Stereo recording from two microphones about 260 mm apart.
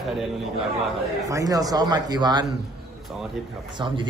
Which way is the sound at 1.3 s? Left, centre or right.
Centre.